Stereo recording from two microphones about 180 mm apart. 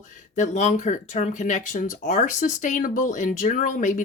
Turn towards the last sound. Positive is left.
turn(degrees=45)  # may be behind; listen again after turning